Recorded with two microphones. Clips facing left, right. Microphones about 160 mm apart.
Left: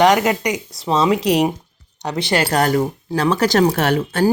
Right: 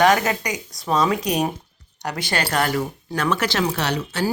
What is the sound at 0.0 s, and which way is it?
Speech, 20° left (ahead or behind).